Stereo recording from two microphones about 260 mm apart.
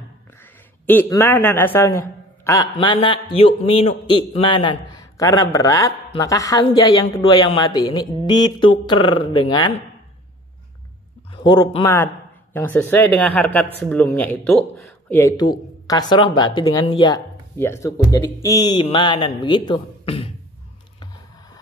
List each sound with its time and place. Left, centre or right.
0.4 s a man's voice: centre
11.3 s a man's voice: centre